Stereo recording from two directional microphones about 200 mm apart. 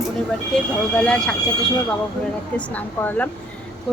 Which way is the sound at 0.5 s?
5° left (ahead or behind).